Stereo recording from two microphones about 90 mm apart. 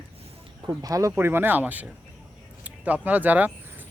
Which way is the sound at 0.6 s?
40° right (ahead or behind).